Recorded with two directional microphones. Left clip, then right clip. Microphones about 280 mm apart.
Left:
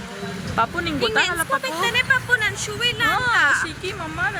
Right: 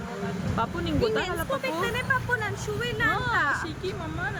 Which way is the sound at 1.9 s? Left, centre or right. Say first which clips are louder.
Left 8 dB; right.